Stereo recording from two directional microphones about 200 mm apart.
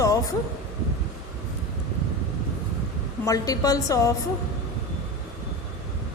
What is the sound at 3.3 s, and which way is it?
Speech, 15° left (ahead or behind).